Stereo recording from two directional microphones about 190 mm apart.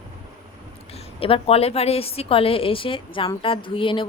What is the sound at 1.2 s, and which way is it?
Speech, 30° left (ahead or behind).